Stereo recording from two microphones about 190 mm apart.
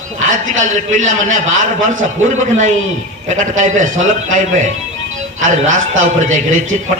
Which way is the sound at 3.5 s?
40° right (ahead or behind).